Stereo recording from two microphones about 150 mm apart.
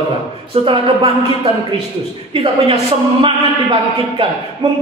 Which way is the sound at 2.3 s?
35° right (ahead or behind).